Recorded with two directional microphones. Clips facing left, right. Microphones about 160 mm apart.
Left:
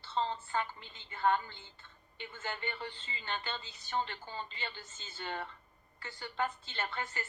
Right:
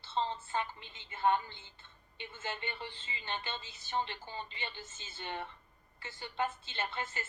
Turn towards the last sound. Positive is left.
turn(degrees=-25)  # may be behind; listen again after turning